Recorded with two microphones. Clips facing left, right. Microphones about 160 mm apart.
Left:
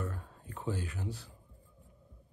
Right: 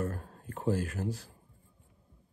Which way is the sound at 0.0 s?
40° right (ahead or behind).